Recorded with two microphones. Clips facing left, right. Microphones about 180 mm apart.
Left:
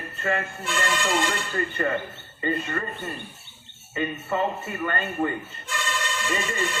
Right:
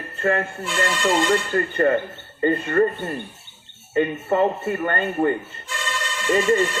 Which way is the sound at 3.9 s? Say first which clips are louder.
Right 7 dB; 50° right (ahead or behind).